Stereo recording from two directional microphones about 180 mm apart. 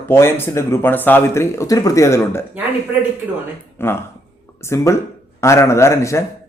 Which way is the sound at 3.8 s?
10° left (ahead or behind).